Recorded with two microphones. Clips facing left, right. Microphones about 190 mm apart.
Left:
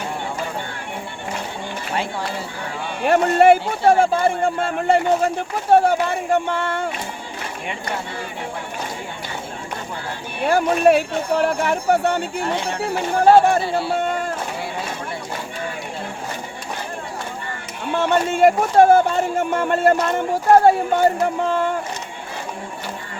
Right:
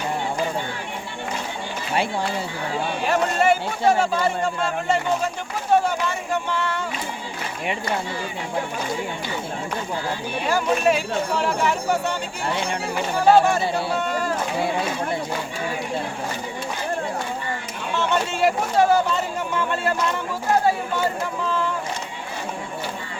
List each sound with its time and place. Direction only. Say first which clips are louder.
3.0 s speech: left 7 dB; 55° left (ahead or behind)
10.4 s speech: left 5 dB; 60° left (ahead or behind)
14.0 s a sound: left 1 dB; 55° left (ahead or behind)
17.9 s speech: left 4 dB; 55° left (ahead or behind)